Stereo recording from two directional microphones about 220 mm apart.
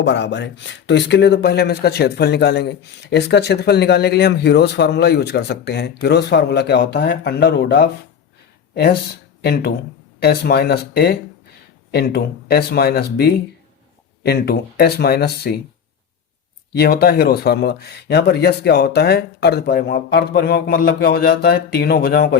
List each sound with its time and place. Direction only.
0.0 s speech: 55° left (ahead or behind)
16.7 s speech: 45° left (ahead or behind)